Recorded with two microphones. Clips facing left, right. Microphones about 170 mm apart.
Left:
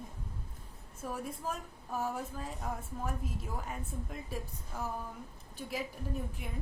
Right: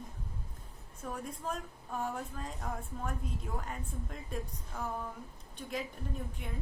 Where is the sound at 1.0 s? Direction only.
5° left (ahead or behind).